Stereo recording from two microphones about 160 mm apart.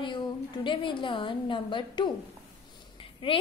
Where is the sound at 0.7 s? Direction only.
30° left (ahead or behind).